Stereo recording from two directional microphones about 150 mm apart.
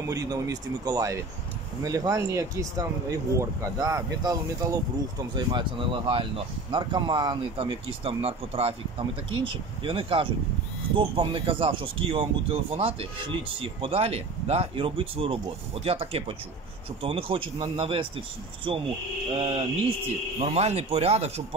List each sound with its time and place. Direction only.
0.0 s speech: 25° right (ahead or behind); by 21.5 s 45° right (ahead or behind)